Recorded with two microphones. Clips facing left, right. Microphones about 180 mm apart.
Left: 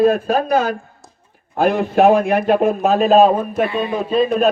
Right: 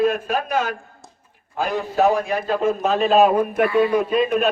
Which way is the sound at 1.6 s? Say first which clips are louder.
Left 6 dB; 60° left (ahead or behind).